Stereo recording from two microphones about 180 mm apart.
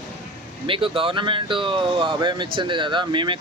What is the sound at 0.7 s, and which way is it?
Speech, 30° right (ahead or behind).